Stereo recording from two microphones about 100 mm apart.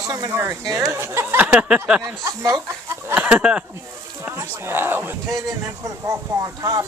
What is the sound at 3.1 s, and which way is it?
Speech, 15° right (ahead or behind).